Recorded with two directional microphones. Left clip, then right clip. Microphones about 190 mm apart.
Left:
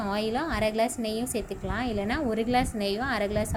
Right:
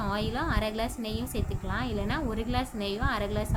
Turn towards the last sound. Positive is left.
turn(degrees=15)  # may be behind; listen again after turning